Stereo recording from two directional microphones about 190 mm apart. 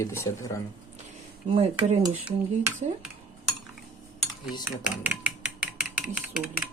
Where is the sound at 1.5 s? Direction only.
30° right (ahead or behind).